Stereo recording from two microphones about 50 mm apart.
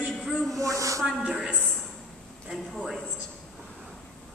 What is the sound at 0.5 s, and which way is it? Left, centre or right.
Speech, right.